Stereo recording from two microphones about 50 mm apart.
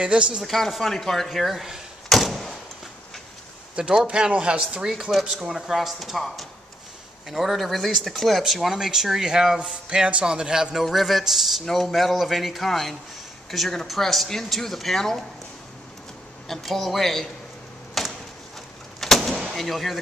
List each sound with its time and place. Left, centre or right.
0.0 s speech: right
0.5 s speech: centre
2.0 s door: centre
3.9 s a man's voice: centre
5.2 s a man's voice: centre
16.4 s speech: centre
18.0 s a sound: centre
18.9 s vehicle: centre